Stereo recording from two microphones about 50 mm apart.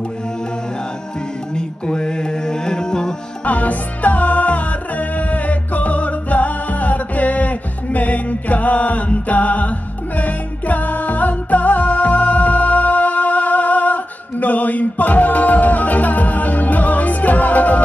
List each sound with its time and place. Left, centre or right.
1.5 s music: centre
3.4 s music: left